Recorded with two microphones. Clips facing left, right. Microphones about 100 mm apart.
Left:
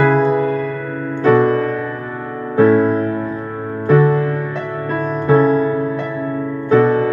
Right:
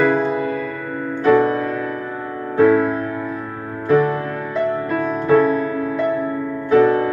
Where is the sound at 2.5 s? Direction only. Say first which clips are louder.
Left 2 dB; 35° left (ahead or behind).